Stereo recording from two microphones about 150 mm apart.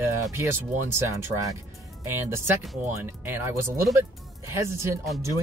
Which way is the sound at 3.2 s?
15° right (ahead or behind).